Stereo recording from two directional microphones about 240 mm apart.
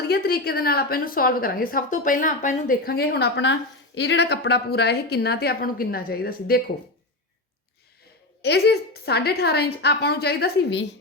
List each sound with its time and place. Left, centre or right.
0.1 s a woman's voice: left
8.4 s a woman's voice: left